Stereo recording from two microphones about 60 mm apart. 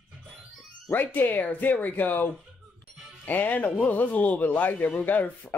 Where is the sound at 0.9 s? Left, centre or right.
Left.